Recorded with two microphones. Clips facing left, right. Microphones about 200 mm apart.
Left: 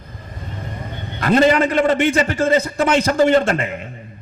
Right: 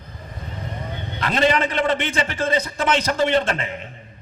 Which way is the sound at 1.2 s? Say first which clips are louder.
Left 6 dB; 45° left (ahead or behind).